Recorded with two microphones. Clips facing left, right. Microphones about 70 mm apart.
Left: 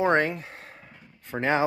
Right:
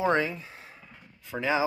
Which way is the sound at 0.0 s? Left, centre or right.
Left.